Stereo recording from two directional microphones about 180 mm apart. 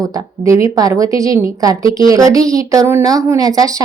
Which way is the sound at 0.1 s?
15° right (ahead or behind).